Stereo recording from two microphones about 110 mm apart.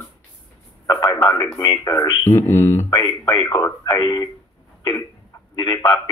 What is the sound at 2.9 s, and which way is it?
A man's voice, 40° left (ahead or behind).